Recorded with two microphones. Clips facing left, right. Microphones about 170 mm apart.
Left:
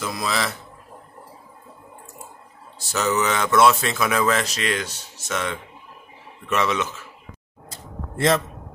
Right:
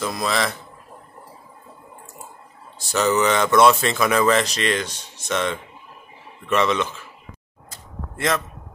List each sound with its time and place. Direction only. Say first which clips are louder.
0.0 s speech: right 2 dB; centre (ahead or behind)
2.9 s speech: right 3 dB; centre (ahead or behind)
7.7 s a sound: left 3 dB; 30° left (ahead or behind)